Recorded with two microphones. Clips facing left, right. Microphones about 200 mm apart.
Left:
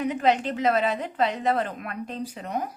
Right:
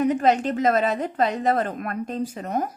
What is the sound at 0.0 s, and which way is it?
A woman's voice, 45° right (ahead or behind).